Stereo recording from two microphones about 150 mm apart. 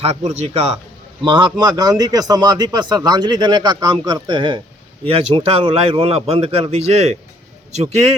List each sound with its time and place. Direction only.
0.0 s speech: 50° right (ahead or behind)
1.2 s a man's voice: 30° right (ahead or behind); by 8.1 s 45° right (ahead or behind)